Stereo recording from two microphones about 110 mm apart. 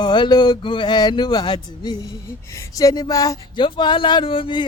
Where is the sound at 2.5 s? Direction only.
30° left (ahead or behind).